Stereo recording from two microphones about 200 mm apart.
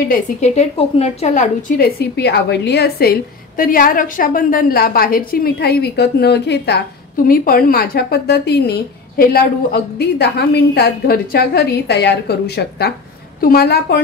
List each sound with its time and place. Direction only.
0.1 s a woman's voice: 35° left (ahead or behind)
2.0 s a woman's voice: 55° left (ahead or behind)
7.2 s a woman's voice: 45° left (ahead or behind)